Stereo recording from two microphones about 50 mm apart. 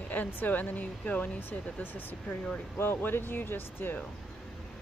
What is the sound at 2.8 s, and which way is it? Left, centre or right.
Speech, left.